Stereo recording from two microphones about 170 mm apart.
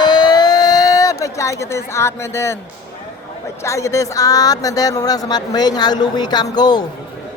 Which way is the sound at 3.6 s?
15° left (ahead or behind).